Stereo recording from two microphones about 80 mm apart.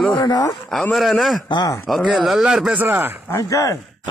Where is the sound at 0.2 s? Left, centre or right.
Left.